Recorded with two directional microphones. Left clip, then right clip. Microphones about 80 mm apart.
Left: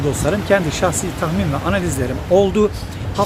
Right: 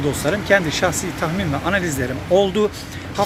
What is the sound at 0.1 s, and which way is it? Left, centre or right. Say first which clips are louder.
Speech: left 1 dB; centre.